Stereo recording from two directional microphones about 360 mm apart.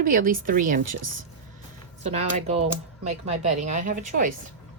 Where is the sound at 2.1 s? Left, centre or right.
Centre.